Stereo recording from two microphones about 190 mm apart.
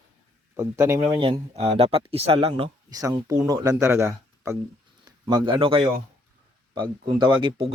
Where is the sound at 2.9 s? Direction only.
20° right (ahead or behind).